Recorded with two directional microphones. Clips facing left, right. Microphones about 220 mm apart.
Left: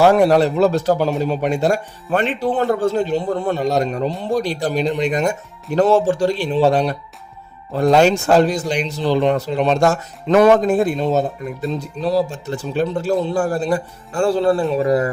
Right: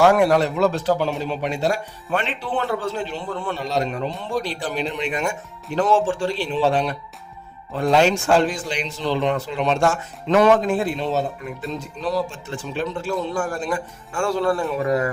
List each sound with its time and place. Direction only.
0.0 s speech: 35° left (ahead or behind)